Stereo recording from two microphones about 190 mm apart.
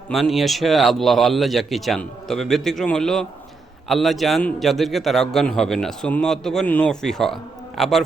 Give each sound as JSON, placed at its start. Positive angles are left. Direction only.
{"t": 0.1, "sound": "a man's voice", "side_deg": 0}